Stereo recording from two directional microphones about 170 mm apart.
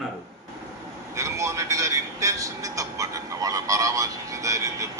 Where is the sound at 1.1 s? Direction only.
20° right (ahead or behind).